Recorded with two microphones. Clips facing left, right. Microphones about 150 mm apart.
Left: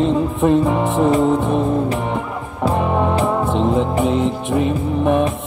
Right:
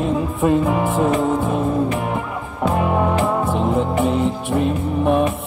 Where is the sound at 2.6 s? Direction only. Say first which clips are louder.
Left 1 dB; centre (ahead or behind).